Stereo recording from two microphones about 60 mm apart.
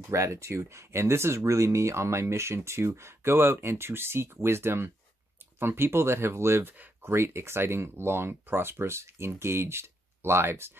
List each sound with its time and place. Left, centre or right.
0.1 s speech: right
6.6 s speech: right